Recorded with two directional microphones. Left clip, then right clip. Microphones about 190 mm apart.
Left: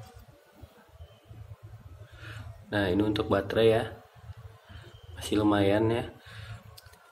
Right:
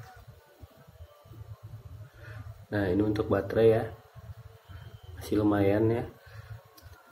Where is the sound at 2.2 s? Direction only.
20° right (ahead or behind).